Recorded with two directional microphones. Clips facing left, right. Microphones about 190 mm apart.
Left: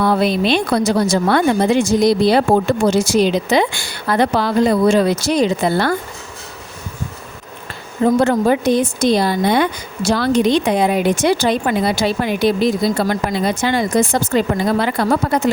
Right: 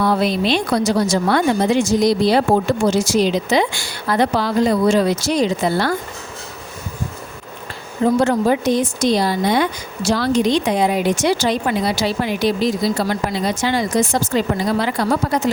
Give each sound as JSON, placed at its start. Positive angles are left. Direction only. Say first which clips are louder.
{"t": 0.0, "sound": "speech", "louder": "left 2 dB", "side_deg": 55}
{"t": 8.2, "sound": "speech", "louder": "left 2 dB", "side_deg": 55}